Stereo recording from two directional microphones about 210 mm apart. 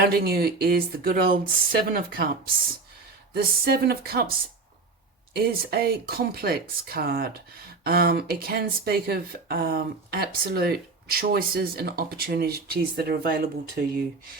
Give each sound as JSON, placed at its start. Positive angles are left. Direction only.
{"t": 0.0, "sound": "speech", "side_deg": -50}
{"t": 3.3, "sound": "speech", "side_deg": -50}
{"t": 5.3, "sound": "speech", "side_deg": -45}